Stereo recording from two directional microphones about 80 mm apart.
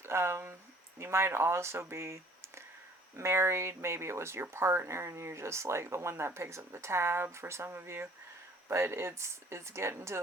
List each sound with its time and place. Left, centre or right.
0.0 s speech: right
3.2 s speech: right